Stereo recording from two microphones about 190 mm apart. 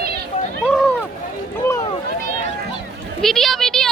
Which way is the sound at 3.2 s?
Centre (ahead or behind).